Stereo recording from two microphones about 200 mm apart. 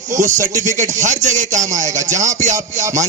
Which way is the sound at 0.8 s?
35° right (ahead or behind).